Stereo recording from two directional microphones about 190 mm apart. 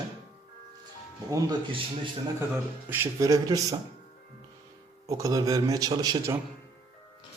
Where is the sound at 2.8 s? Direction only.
10° right (ahead or behind).